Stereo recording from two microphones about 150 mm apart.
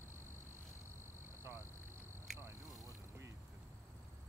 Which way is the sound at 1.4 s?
15° right (ahead or behind).